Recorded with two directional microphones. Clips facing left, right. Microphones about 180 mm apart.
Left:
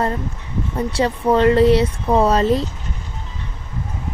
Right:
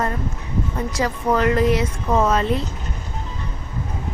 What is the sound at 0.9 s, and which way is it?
Speech, 30° left (ahead or behind).